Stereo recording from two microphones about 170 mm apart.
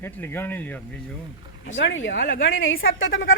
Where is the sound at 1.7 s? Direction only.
90° left.